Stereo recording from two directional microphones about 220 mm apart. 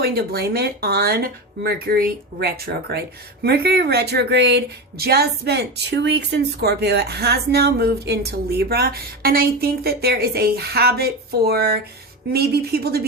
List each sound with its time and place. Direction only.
0.0 s a woman's voice: 45° right (ahead or behind)